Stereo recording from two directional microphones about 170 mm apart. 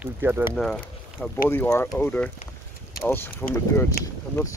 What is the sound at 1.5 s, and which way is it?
Speech, 15° left (ahead or behind).